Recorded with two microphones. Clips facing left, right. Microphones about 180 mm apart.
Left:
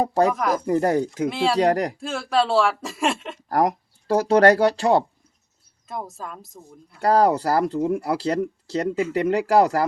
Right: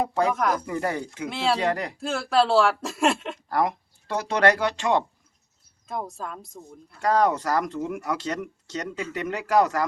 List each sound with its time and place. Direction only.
0.0 s speech: 40° left (ahead or behind)
0.3 s speech: centre (ahead or behind)
0.6 s speech: 35° left (ahead or behind)
1.3 s speech: centre (ahead or behind)
1.5 s speech: 40° left (ahead or behind)
2.0 s speech: centre (ahead or behind)
3.5 s speech: 40° left (ahead or behind)
5.9 s speech: centre (ahead or behind)
7.0 s speech: 35° left (ahead or behind)